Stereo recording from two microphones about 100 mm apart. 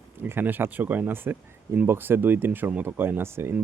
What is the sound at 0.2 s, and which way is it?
Speech, 20° right (ahead or behind).